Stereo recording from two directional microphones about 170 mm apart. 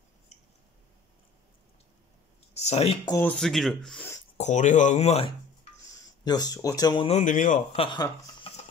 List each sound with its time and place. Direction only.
2.5 s speech: 40° left (ahead or behind)
3.1 s speech: 15° left (ahead or behind)
3.3 s speech: centre (ahead or behind)
4.4 s speech: 45° left (ahead or behind)
5.9 s speech: 25° left (ahead or behind)
7.1 s speech: 45° left (ahead or behind)
7.7 s speech: 30° left (ahead or behind)